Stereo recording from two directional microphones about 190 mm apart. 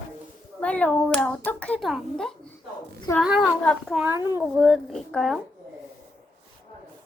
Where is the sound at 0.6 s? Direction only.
5° left (ahead or behind).